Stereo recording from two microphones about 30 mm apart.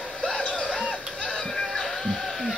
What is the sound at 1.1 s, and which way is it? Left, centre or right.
Music, left.